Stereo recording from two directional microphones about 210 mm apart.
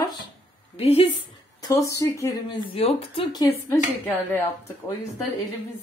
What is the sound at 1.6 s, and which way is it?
Speech, 15° left (ahead or behind).